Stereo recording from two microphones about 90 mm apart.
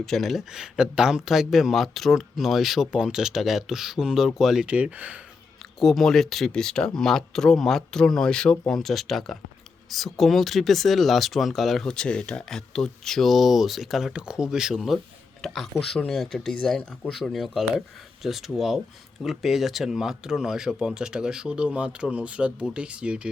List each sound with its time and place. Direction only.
0.0 s speech: centre (ahead or behind)
4.7 s speech: 15° right (ahead or behind)
5.8 s speech: centre (ahead or behind)